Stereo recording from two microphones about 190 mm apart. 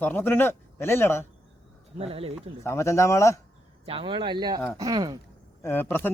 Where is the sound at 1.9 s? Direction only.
30° right (ahead or behind).